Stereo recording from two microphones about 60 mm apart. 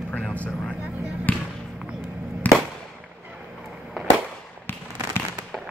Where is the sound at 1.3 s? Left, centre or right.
Left.